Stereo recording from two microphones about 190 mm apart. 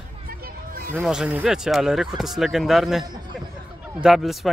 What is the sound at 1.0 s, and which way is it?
Speech, 5° right (ahead or behind).